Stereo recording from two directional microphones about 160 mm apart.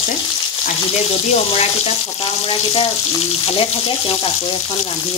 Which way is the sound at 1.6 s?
40° left (ahead or behind).